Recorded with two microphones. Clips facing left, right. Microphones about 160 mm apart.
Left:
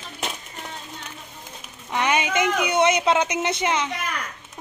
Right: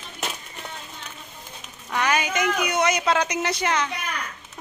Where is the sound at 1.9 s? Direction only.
25° left (ahead or behind).